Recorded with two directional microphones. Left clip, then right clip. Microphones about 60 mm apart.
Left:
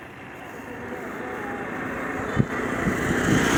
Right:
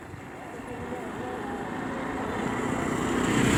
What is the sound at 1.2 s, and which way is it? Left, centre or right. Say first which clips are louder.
Vehicle: left 4 dB; right.